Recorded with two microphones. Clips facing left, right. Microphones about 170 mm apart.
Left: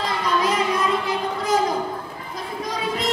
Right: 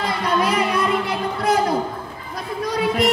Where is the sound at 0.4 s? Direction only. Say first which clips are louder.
Right 1 dB; 65° right (ahead or behind).